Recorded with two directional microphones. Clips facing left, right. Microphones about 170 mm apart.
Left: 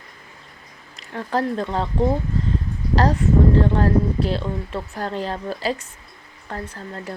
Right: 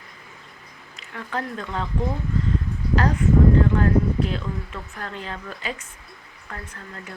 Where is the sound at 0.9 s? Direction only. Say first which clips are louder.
Left 7 dB; 35° left (ahead or behind).